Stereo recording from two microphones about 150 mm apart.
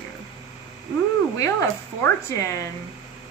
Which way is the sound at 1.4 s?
20° left (ahead or behind).